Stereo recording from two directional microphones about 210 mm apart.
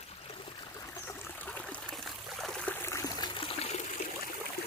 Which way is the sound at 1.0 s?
5° left (ahead or behind).